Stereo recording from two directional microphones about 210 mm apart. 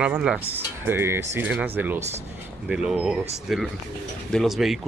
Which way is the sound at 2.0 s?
30° right (ahead or behind).